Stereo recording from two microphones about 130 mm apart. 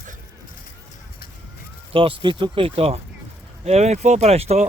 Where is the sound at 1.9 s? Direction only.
45° right (ahead or behind).